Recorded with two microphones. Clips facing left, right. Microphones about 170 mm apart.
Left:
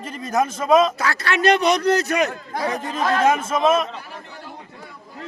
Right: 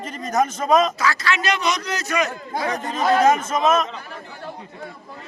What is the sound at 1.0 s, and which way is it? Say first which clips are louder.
A man's voice: even; 60° left (ahead or behind).